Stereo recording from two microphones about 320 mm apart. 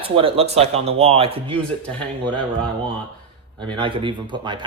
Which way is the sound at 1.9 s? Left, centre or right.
Centre.